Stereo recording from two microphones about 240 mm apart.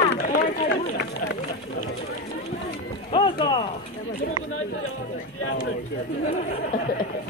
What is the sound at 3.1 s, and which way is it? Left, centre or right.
Clip-clop, left.